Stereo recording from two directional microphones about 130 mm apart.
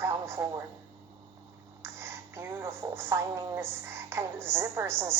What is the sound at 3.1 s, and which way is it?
A woman's voice, 25° right (ahead or behind).